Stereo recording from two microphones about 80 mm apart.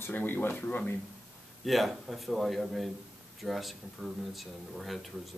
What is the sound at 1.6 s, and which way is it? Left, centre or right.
Speech, centre.